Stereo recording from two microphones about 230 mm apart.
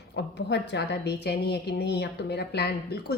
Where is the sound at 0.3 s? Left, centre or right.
Left.